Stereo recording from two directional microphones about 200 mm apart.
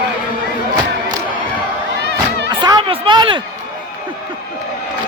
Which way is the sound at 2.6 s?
20° right (ahead or behind).